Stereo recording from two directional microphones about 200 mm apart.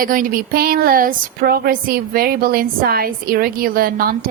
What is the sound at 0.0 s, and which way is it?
Speech, 45° right (ahead or behind).